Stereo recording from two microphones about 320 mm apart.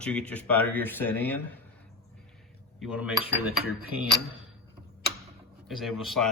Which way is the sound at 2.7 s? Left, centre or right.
Centre.